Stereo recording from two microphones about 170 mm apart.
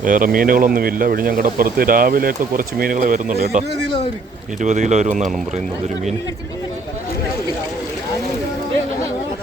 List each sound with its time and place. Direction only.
0.0 s speech: 55° right (ahead or behind)
3.3 s speech: 40° right (ahead or behind)
4.6 s speech: 45° right (ahead or behind)